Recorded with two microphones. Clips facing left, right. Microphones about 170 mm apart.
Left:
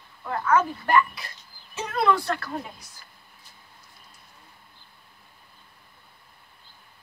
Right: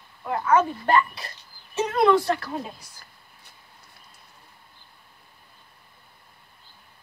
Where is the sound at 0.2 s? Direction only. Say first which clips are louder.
Right 2 dB; 20° right (ahead or behind).